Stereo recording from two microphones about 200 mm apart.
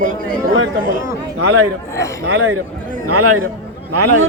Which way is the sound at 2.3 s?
90° right.